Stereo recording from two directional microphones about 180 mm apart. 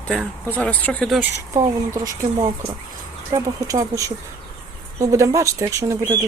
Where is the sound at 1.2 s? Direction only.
15° right (ahead or behind).